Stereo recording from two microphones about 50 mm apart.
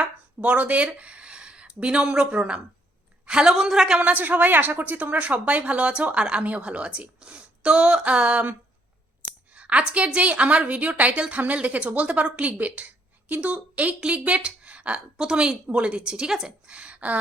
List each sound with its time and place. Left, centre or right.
0.0 s a woman's voice: right
4.1 s a woman's voice: right
9.5 s a sound: right
10.2 s a woman's voice: right
16.6 s speech: right